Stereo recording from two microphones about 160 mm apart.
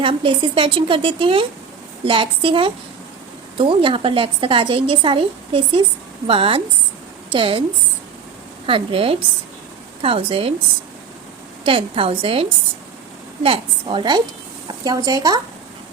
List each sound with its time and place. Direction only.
0.0 s a woman's voice: 30° right (ahead or behind)
8.6 s speech: 35° right (ahead or behind)
11.6 s speech: 35° right (ahead or behind)